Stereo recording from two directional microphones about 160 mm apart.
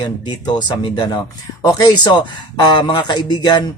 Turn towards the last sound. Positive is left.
turn(degrees=25)  # may be behind; listen again after turning